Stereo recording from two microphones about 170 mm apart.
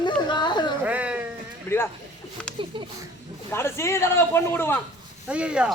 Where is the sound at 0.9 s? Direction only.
10° right (ahead or behind).